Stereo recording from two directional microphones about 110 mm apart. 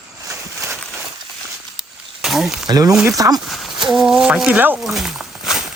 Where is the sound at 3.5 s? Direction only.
5° right (ahead or behind).